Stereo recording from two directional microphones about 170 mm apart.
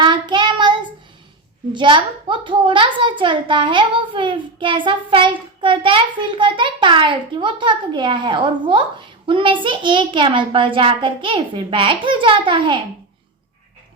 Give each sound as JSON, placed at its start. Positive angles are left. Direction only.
{"t": 0.0, "sound": "child singing", "side_deg": -25}
{"t": 1.7, "sound": "a child's voice", "side_deg": -30}